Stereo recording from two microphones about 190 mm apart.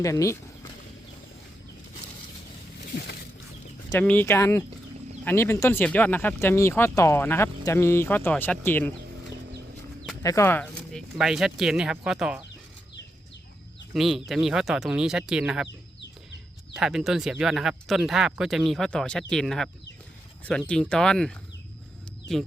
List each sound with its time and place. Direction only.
0.0 s speech: 15° left (ahead or behind)
2.8 s a sound: 55° left (ahead or behind)
3.8 s speech: 10° left (ahead or behind)
10.2 s speech: 15° left (ahead or behind); by 12.4 s 5° right (ahead or behind)
13.9 s speech: centre (ahead or behind)
16.7 s speech: 5° right (ahead or behind)